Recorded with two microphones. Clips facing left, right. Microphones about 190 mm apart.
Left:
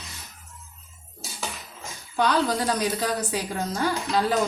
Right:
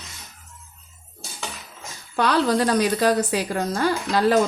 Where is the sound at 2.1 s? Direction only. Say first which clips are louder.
Right 3 dB; 70° right (ahead or behind).